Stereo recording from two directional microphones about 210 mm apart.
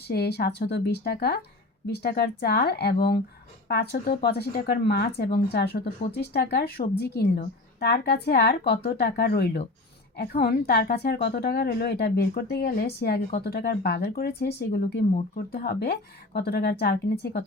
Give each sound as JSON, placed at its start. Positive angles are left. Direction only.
{"t": 0.1, "sound": "speech", "side_deg": 50}